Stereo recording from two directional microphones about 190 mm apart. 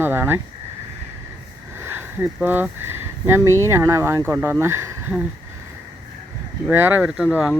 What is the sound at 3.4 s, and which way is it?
Speech, 15° right (ahead or behind).